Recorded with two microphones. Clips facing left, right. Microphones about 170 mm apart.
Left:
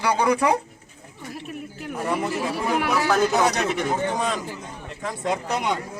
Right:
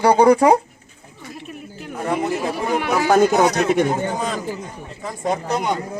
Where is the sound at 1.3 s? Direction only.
5° left (ahead or behind).